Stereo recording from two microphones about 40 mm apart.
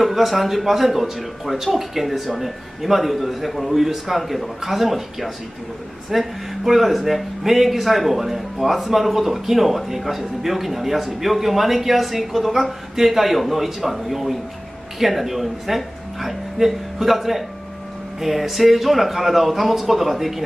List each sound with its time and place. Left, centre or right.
0.0 s speech: centre